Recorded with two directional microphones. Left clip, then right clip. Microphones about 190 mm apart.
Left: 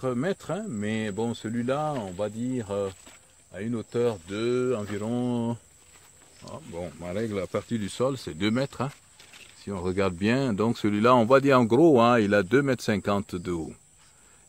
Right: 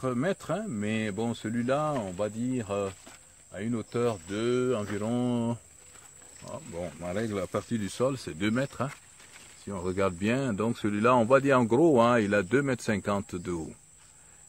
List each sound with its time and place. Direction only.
0.0 s speech: 35° left (ahead or behind)